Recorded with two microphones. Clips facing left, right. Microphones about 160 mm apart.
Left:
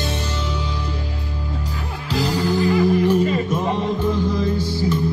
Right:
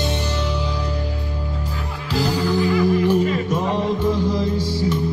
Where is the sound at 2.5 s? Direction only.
55° left (ahead or behind).